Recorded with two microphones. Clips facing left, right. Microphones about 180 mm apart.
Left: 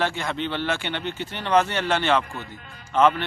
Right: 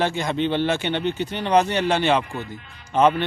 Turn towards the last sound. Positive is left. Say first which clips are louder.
# right 1 dB
turn(degrees=-15)  # may be behind; listen again after turning